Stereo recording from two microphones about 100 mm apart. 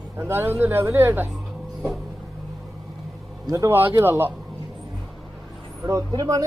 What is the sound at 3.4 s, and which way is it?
Speech, 30° right (ahead or behind).